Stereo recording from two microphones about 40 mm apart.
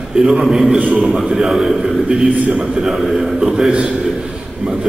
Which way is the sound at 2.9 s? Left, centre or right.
Centre.